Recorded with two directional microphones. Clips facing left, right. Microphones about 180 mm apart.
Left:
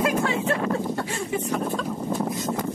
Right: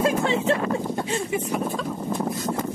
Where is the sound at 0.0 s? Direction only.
25° right (ahead or behind).